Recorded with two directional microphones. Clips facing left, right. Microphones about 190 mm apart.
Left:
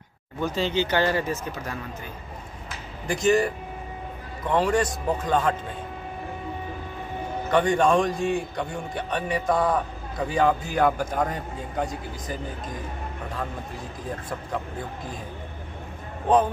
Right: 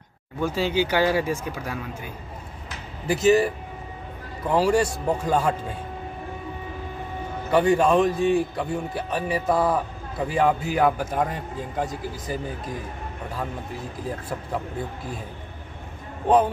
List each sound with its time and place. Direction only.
0.4 s speech: 10° right (ahead or behind)
3.1 s a man's voice: 5° right (ahead or behind)
7.5 s a man's voice: 5° right (ahead or behind)